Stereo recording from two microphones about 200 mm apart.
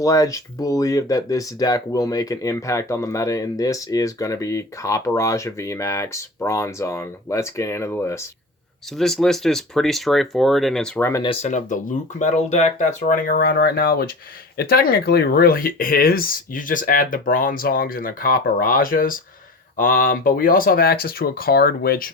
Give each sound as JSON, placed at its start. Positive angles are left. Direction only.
{"t": 0.0, "sound": "speech", "side_deg": 15}
{"t": 8.9, "sound": "speech", "side_deg": 0}
{"t": 11.4, "sound": "speech", "side_deg": 40}